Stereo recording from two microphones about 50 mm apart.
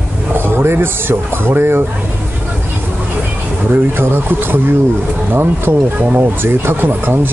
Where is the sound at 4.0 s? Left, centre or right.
Right.